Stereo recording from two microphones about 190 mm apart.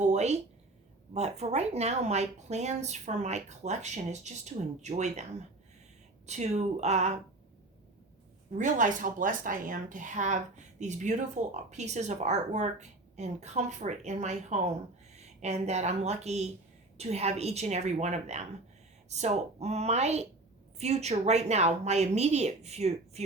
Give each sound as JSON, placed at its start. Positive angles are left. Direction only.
{"t": 0.0, "sound": "a sound", "side_deg": -35}
{"t": 1.1, "sound": "a woman's voice", "side_deg": -35}
{"t": 6.2, "sound": "a woman's voice", "side_deg": -35}
{"t": 8.5, "sound": "a woman's voice", "side_deg": -40}